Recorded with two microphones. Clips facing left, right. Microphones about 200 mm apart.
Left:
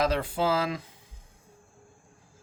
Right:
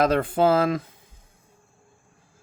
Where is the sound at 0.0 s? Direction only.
55° right (ahead or behind).